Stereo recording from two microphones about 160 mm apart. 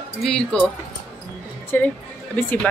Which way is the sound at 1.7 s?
10° left (ahead or behind).